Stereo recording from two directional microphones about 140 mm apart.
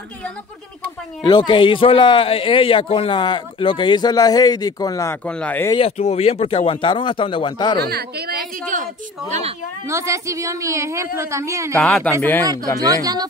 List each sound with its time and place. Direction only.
1.2 s a man's voice: 35° left (ahead or behind)
5.2 s speech: 10° left (ahead or behind)
5.8 s a man's voice: 50° left (ahead or behind); by 7.7 s 30° left (ahead or behind)
8.3 s a woman's voice: 70° right (ahead or behind)
9.8 s a woman's voice: 20° right (ahead or behind)
11.7 s speech: 5° left (ahead or behind)
12.7 s a woman's voice: 25° right (ahead or behind)